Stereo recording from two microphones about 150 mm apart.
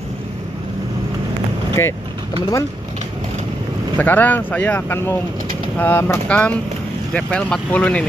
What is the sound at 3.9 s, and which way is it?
Speech, 10° left (ahead or behind).